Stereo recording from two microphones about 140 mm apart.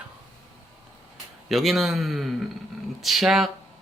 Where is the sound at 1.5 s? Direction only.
Centre (ahead or behind).